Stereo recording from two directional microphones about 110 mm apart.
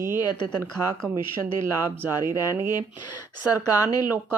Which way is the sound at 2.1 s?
35° left (ahead or behind).